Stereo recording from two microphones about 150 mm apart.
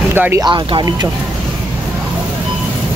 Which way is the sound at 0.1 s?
15° right (ahead or behind).